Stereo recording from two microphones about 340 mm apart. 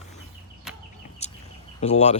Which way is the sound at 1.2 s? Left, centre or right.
Centre.